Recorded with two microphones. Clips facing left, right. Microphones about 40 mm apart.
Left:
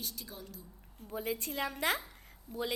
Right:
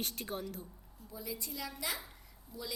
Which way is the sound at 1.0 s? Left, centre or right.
Left.